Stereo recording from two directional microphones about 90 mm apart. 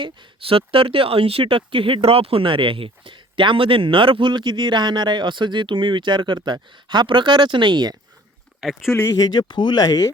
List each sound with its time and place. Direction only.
0.0 s speech: 75° right (ahead or behind); by 7.9 s 55° right (ahead or behind)
8.9 s speech: 30° left (ahead or behind)
9.1 s speech: 50° left (ahead or behind)